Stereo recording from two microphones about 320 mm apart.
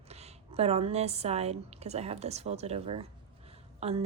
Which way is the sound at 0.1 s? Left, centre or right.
Centre.